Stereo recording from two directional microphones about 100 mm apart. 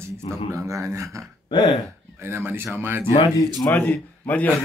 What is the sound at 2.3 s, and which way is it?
Speech, 20° right (ahead or behind).